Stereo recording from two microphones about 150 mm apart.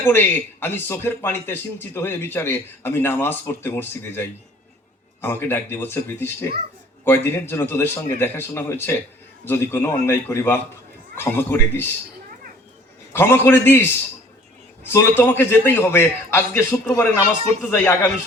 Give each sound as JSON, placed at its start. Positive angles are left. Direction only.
{"t": 0.0, "sound": "a man's voice", "side_deg": 15}
{"t": 13.1, "sound": "a man's voice", "side_deg": 15}
{"t": 14.9, "sound": "a man's voice", "side_deg": 15}